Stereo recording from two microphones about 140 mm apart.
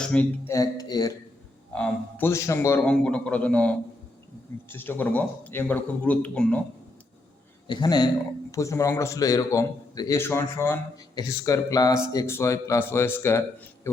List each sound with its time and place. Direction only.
0.0 s a man's voice: 10° left (ahead or behind)
0.5 s speech: 25° left (ahead or behind)
1.7 s a man's voice: 10° left (ahead or behind)
7.7 s a man's voice: 30° left (ahead or behind)